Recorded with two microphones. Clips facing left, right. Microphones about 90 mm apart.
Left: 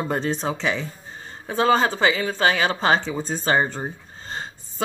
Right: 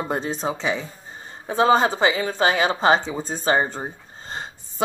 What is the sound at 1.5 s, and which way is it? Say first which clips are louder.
A woman's voice: right 2 dB; 20° right (ahead or behind).